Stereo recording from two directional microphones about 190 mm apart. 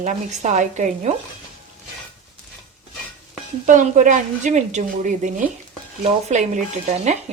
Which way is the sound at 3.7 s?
40° right (ahead or behind).